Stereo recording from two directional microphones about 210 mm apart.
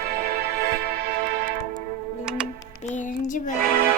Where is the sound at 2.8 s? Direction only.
35° left (ahead or behind).